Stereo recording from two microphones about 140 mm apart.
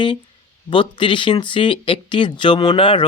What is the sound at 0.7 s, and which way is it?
Speech, 35° left (ahead or behind).